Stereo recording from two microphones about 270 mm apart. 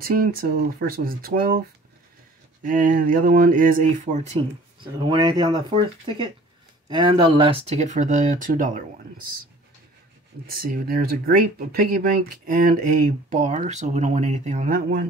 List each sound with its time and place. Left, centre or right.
0.0 s speech: right
2.6 s speech: right
6.9 s speech: centre
10.4 s speech: right